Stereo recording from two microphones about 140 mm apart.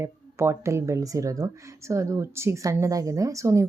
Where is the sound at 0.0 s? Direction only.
20° right (ahead or behind).